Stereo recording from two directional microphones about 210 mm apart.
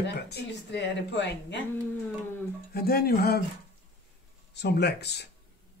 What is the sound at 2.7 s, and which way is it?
Speech, 50° left (ahead or behind).